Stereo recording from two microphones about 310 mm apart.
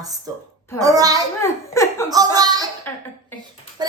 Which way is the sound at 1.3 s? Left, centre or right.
Centre.